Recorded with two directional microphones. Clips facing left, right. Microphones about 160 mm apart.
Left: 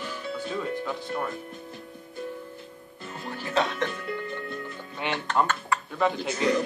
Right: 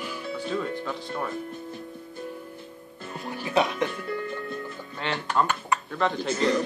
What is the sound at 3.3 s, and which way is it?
Speech, 15° right (ahead or behind).